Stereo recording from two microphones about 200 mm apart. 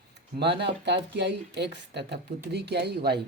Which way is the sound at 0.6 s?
60° right (ahead or behind).